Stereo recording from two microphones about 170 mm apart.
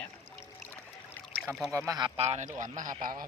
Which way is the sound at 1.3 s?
5° left (ahead or behind).